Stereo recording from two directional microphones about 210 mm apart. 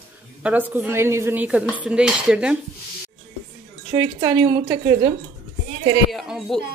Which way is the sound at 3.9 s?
20° right (ahead or behind).